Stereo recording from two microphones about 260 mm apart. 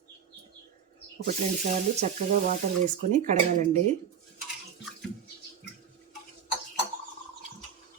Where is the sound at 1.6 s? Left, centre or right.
Right.